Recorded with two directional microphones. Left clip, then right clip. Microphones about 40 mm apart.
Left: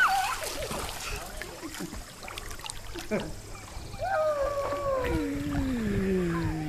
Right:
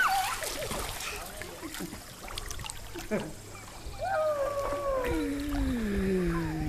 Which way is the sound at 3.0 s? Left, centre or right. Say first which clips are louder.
Left 2 dB; right.